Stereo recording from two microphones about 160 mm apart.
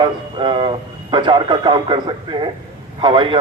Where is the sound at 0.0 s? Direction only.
30° right (ahead or behind).